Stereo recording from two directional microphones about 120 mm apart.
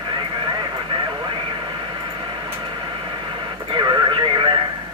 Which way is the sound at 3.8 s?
40° right (ahead or behind).